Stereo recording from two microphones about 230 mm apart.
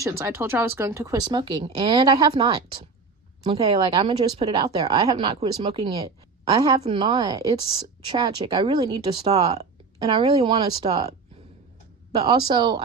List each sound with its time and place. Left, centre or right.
0.2 s speech: centre
3.5 s speech: right
12.1 s speech: centre